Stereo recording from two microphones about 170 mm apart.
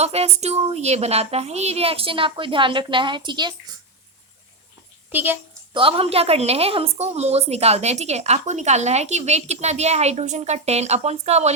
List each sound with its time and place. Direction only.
0.0 s a woman's voice: 40° right (ahead or behind)
5.1 s a woman's voice: 10° right (ahead or behind)
5.7 s a woman's voice: 35° right (ahead or behind)